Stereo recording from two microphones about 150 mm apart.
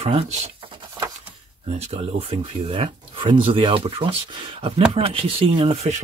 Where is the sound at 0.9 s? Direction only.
25° right (ahead or behind).